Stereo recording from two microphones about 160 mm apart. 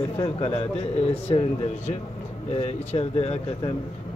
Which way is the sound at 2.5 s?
40° left (ahead or behind).